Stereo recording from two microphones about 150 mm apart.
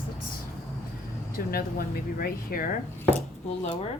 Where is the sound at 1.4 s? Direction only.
80° left.